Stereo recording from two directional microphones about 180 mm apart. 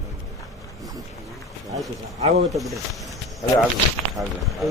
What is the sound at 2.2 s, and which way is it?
Speech, 40° right (ahead or behind).